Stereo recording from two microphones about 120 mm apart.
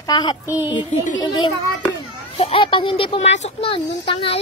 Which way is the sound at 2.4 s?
50° left (ahead or behind).